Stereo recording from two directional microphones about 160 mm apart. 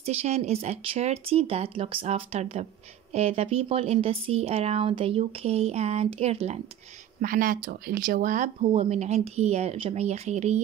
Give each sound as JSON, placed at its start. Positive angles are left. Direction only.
{"t": 0.0, "sound": "speech", "side_deg": -40}
{"t": 7.2, "sound": "speech", "side_deg": -60}
{"t": 8.7, "sound": "speech", "side_deg": -40}